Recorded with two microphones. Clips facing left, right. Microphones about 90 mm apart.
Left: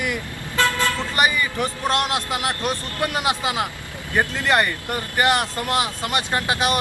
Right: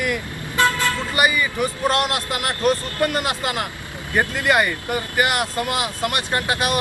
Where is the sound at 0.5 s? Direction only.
20° right (ahead or behind).